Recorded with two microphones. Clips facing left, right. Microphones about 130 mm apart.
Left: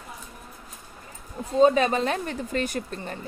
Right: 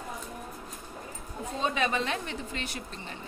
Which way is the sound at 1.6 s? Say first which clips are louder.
Left 10 dB; 40° left (ahead or behind).